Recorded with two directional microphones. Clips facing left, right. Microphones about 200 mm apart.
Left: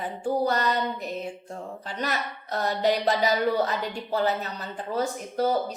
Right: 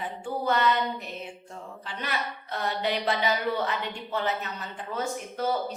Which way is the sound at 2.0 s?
40° left (ahead or behind).